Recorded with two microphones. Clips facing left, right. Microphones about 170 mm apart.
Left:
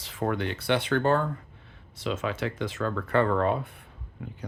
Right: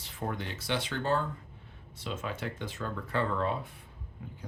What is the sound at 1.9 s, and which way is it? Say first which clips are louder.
Speech: left 7 dB; 90° left.